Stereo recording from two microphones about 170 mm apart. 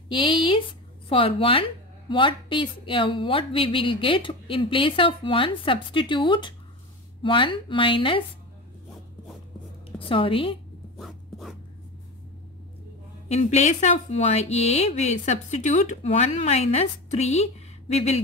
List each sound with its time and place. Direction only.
0.1 s a woman's voice: 30° left (ahead or behind)
9.8 s a woman's voice: 30° left (ahead or behind)
11.0 s writing: centre (ahead or behind)
13.3 s a woman's voice: 40° left (ahead or behind)